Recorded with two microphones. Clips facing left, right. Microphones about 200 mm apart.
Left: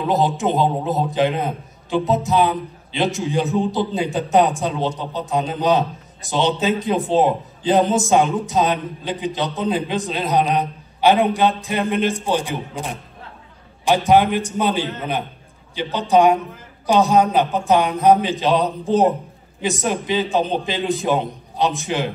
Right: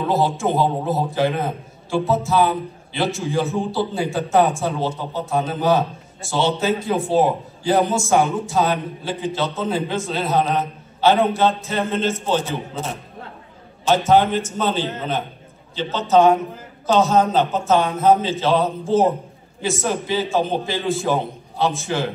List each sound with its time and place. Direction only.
0.1 s a man's voice: 20° left (ahead or behind)